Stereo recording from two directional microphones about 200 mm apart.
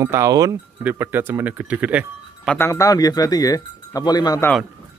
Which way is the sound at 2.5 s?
15° left (ahead or behind).